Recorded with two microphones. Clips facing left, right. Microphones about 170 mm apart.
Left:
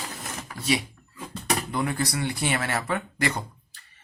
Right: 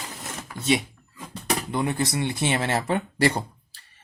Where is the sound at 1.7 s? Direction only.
20° right (ahead or behind).